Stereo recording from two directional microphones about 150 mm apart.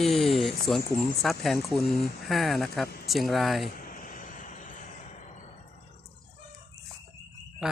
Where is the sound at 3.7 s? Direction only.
70° left (ahead or behind).